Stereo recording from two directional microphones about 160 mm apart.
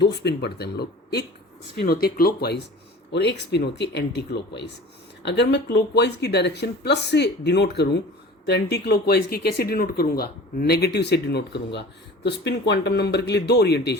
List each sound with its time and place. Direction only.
0.0 s speech: 90° left
1.9 s speech: 70° left (ahead or behind)
3.1 s speech: 90° left